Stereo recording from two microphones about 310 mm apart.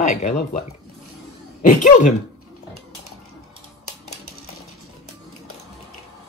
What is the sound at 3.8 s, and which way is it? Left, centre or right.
Typewriter, left.